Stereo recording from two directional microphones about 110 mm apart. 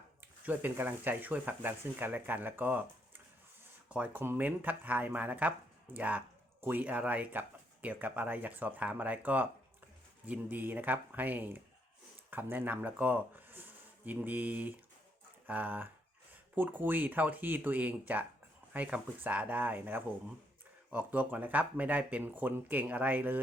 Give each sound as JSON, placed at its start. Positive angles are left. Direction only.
{"t": 0.4, "sound": "speech", "side_deg": -15}